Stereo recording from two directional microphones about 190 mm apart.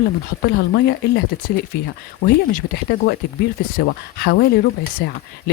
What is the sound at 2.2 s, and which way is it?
Speech, 50° left (ahead or behind).